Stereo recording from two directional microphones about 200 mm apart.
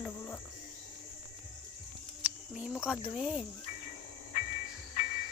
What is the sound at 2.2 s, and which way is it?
Speech, 5° right (ahead or behind).